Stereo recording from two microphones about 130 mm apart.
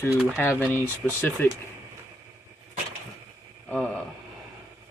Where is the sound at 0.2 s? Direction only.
5° left (ahead or behind).